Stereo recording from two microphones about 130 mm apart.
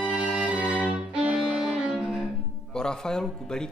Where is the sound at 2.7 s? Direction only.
5° left (ahead or behind).